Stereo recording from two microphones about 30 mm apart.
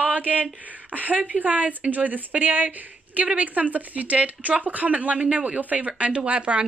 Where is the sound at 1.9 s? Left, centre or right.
Right.